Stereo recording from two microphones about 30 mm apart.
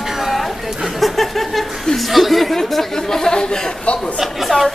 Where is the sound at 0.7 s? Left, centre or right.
Centre.